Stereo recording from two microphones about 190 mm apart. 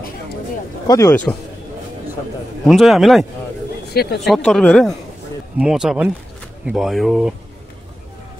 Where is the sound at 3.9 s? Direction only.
55° left (ahead or behind).